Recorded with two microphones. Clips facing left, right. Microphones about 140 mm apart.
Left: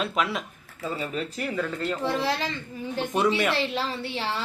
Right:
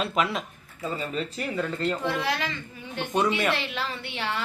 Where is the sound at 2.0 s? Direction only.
30° left (ahead or behind).